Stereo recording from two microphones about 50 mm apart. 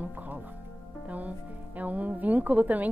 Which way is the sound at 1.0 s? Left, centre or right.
Right.